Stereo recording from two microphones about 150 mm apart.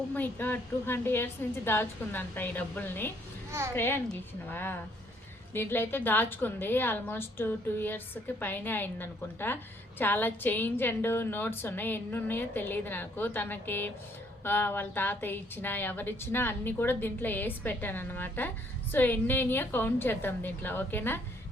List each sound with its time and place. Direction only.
0.1 s a woman's voice: 10° left (ahead or behind)